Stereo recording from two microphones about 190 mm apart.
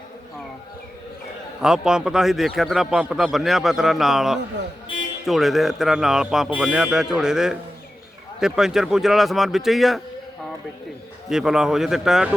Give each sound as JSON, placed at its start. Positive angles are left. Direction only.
{"t": 1.6, "sound": "speech", "side_deg": -5}
{"t": 11.3, "sound": "speech", "side_deg": -5}